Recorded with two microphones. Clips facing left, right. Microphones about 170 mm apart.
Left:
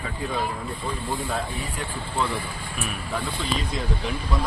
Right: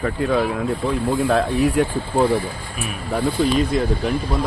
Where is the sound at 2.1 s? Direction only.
50° right (ahead or behind).